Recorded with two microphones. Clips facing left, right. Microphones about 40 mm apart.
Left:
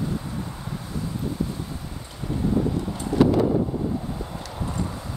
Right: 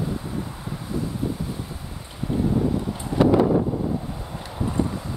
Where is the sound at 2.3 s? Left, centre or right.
Centre.